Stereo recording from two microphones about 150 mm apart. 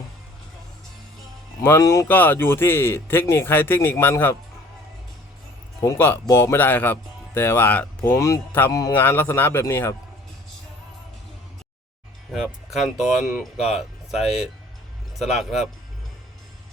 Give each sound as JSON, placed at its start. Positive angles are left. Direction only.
{"t": 1.6, "sound": "a man's voice", "side_deg": 20}
{"t": 5.8, "sound": "a man's voice", "side_deg": 15}
{"t": 8.1, "sound": "a man's voice", "side_deg": 20}
{"t": 12.3, "sound": "speech", "side_deg": 0}